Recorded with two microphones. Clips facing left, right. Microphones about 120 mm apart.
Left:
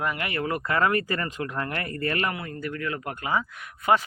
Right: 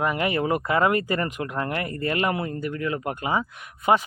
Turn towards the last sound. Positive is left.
turn(degrees=-20)  # may be behind; listen again after turning